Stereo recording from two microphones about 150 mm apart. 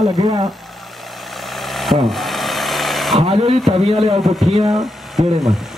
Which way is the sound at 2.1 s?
Centre (ahead or behind).